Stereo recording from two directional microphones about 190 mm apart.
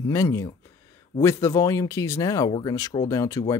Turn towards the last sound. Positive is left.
turn(degrees=15)  # may be behind; listen again after turning